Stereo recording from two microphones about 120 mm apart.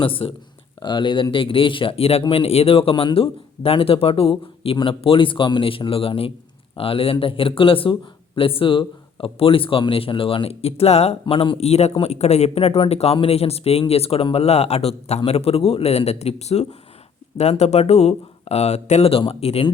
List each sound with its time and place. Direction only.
0.2 s speech: 55° left (ahead or behind)
0.8 s speech: 40° left (ahead or behind); by 19.6 s 55° left (ahead or behind)